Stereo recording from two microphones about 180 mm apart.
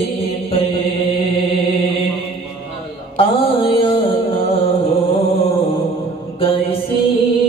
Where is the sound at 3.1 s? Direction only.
30° left (ahead or behind).